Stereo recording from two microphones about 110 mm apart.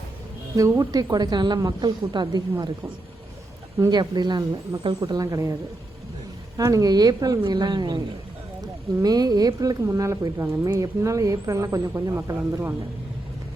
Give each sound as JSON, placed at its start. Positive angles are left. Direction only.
{"t": 0.5, "sound": "speech", "side_deg": -30}
{"t": 3.8, "sound": "speech", "side_deg": -30}
{"t": 6.6, "sound": "speech", "side_deg": -30}